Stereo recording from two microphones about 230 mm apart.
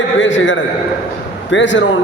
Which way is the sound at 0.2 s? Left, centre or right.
Left.